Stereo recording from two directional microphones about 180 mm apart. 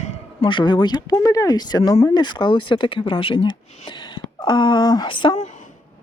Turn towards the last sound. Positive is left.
turn(degrees=30)  # may be behind; listen again after turning